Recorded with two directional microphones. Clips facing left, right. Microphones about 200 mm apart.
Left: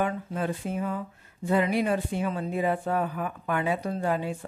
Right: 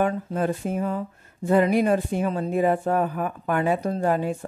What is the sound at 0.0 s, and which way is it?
Speech, 45° right (ahead or behind).